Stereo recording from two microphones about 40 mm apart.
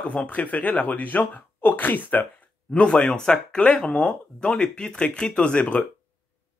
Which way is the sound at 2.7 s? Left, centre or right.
Left.